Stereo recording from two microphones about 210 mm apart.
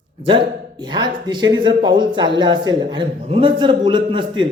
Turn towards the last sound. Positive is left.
turn(degrees=-20)  # may be behind; listen again after turning